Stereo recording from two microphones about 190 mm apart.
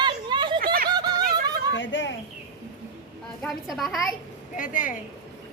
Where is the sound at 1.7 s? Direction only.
80° left.